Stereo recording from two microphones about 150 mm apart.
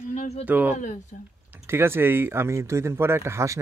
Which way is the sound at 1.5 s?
15° right (ahead or behind).